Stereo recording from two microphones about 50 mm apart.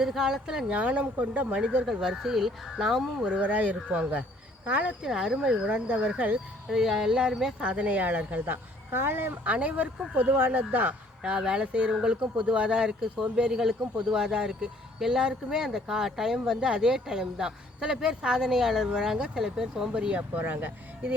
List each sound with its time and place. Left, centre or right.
0.0 s speech: centre
0.7 s speech: right
1.9 s speech: centre
3.2 s speech: right
5.0 s speech: centre
5.6 s speech: right
6.7 s speech: centre
7.6 s speech: right
8.9 s speech: right
9.4 s speech: right
10.2 s speech: right
11.2 s speech: centre
20.3 s speech: right